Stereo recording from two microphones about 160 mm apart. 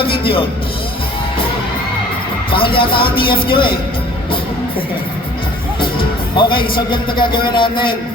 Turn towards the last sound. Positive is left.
turn(degrees=30)  # may be behind; listen again after turning